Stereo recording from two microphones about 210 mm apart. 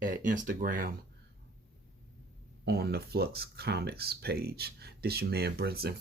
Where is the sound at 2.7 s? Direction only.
50° right (ahead or behind).